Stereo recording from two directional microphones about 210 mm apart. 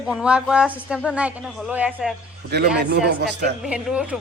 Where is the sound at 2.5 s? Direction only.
50° right (ahead or behind).